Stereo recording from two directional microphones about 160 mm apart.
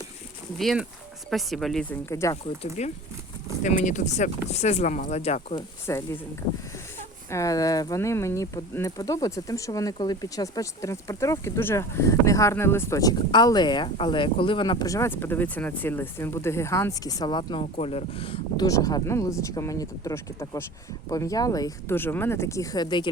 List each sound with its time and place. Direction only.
0.6 s speech: centre (ahead or behind); by 2.3 s 15° left (ahead or behind)
3.6 s speech: 50° left (ahead or behind)
5.9 s speech: 20° left (ahead or behind)
7.3 s speech: 20° left (ahead or behind); by 18.6 s 35° left (ahead or behind)
18.6 s speech: 20° left (ahead or behind)